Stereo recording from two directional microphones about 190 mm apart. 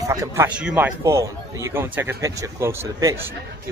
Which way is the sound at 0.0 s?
15° right (ahead or behind).